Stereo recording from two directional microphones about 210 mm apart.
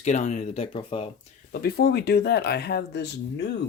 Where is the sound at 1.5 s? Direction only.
50° left (ahead or behind).